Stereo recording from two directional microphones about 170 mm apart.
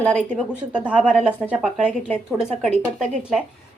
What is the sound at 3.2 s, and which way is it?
Speech, 5° right (ahead or behind).